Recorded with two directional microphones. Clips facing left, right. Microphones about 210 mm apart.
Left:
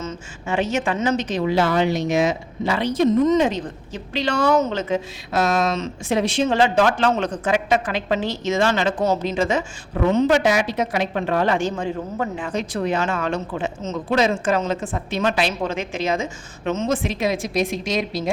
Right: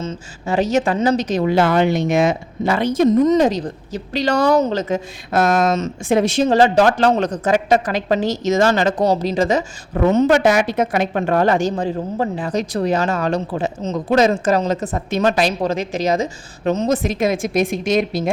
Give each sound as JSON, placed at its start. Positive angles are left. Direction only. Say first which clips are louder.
{"t": 0.0, "sound": "a woman's voice", "louder": "right 3 dB", "side_deg": -30}